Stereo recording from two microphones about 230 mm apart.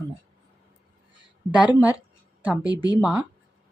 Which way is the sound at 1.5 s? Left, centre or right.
Centre.